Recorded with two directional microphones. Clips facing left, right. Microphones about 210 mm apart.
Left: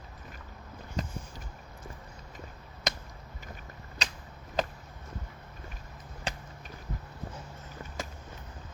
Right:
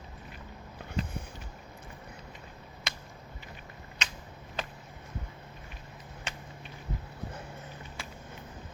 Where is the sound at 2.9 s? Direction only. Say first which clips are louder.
Left 8 dB; 40° left (ahead or behind).